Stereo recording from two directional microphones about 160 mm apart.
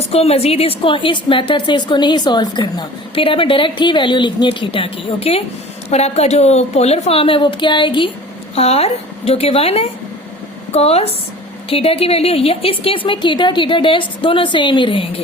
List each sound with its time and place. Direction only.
0.0 s a woman's voice: 40° left (ahead or behind)